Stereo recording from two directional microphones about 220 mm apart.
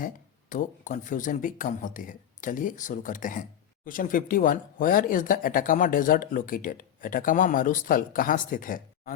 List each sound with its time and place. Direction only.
0.5 s speech: 35° left (ahead or behind)